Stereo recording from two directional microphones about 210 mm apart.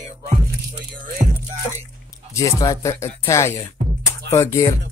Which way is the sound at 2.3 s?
15° left (ahead or behind).